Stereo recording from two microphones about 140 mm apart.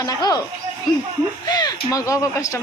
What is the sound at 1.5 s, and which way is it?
Speech, 30° left (ahead or behind).